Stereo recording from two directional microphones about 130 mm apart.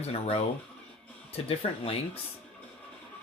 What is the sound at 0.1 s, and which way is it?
Speech, 50° left (ahead or behind).